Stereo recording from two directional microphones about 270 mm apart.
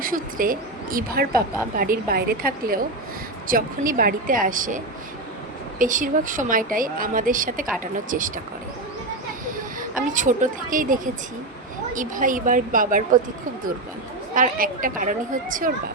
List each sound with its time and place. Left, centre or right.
0.0 s speech: right
5.8 s a woman's voice: right
10.1 s a woman's voice: right
14.3 s a woman's voice: right